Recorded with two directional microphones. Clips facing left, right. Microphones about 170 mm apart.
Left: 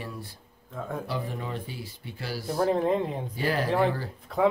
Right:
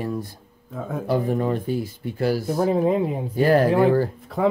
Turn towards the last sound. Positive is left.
turn(degrees=0)  # may be behind; listen again after turning